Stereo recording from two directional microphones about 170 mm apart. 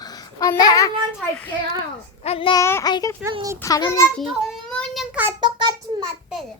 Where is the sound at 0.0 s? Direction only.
20° left (ahead or behind).